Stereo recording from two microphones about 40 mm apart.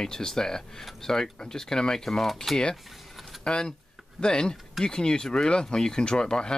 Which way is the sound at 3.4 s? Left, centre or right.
Left.